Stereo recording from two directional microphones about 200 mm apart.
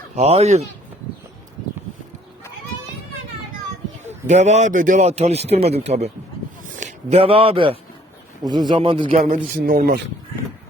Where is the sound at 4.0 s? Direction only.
35° right (ahead or behind).